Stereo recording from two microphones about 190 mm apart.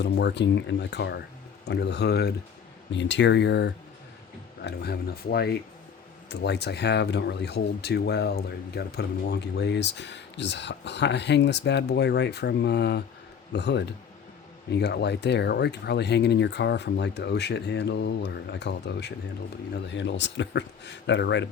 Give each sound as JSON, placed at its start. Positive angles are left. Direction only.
{"t": 0.0, "sound": "speech", "side_deg": 65}
{"t": 2.9, "sound": "speech", "side_deg": 70}